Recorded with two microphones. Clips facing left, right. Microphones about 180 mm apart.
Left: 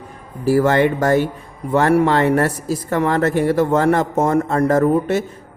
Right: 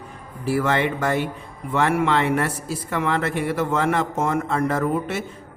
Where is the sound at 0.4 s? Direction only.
40° left (ahead or behind).